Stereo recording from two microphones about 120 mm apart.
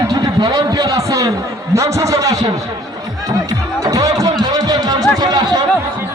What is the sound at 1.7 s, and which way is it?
Speech, 25° right (ahead or behind).